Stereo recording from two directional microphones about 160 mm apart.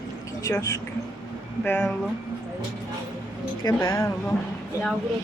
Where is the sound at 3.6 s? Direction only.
20° left (ahead or behind).